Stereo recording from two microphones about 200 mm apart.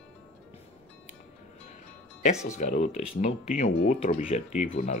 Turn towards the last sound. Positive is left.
turn(degrees=35)  # may be behind; listen again after turning